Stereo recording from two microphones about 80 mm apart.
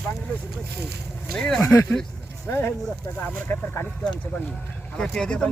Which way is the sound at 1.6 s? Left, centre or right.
Left.